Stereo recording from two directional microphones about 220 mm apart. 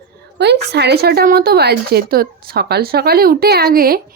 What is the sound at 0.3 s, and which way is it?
A woman's voice, 50° right (ahead or behind).